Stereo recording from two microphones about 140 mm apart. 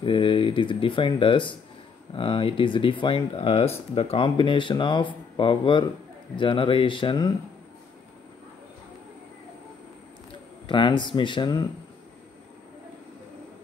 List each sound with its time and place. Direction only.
0.0 s speech: 40° left (ahead or behind)
10.7 s speech: 35° left (ahead or behind)